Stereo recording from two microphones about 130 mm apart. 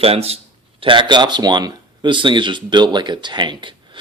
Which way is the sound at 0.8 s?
40° right (ahead or behind).